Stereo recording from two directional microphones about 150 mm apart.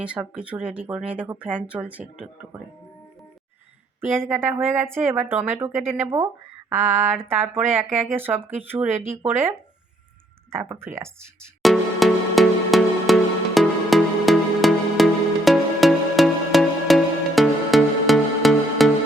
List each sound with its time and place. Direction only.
0.0 s speech: 10° right (ahead or behind)
4.4 s speech: 15° right (ahead or behind)
10.5 s speech: 15° right (ahead or behind)
11.6 s music: centre (ahead or behind)